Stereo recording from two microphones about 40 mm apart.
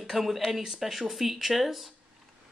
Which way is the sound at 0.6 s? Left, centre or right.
Centre.